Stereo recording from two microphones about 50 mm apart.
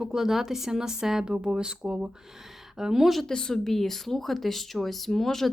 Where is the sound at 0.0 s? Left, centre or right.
Centre.